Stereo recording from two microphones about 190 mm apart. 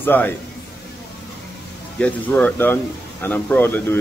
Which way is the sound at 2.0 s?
5° left (ahead or behind).